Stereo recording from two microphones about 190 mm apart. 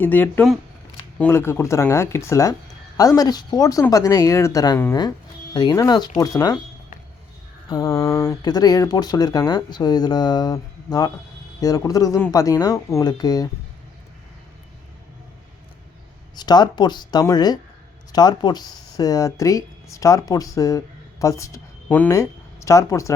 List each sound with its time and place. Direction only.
0.0 s speech: 10° left (ahead or behind)
7.7 s speech: 15° left (ahead or behind)
11.6 s speech: 20° left (ahead or behind)
16.3 s speech: 20° left (ahead or behind)